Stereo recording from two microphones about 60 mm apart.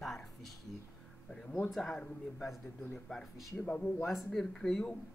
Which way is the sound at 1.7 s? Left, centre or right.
Centre.